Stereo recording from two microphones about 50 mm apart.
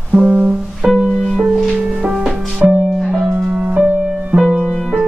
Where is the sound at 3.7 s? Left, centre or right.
Right.